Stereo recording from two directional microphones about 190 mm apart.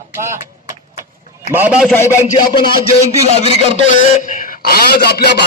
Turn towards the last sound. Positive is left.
turn(degrees=55)  # may be behind; listen again after turning